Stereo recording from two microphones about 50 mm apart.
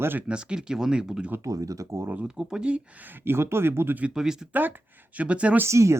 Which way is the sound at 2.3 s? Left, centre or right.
Centre.